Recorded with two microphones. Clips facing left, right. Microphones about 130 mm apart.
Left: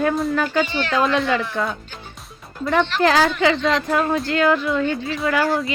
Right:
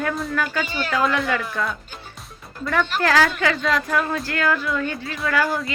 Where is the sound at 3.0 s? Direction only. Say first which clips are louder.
Left 2 dB; 20° left (ahead or behind).